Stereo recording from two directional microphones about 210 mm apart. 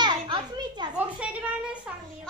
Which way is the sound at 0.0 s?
20° right (ahead or behind).